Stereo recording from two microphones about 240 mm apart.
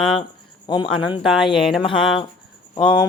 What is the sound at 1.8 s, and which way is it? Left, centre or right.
Speech, left.